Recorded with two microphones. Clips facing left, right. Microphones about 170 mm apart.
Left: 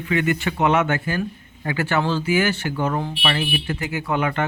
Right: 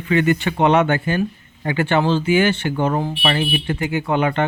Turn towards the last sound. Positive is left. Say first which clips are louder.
# right 4 dB
turn(degrees=-30)  # may be behind; listen again after turning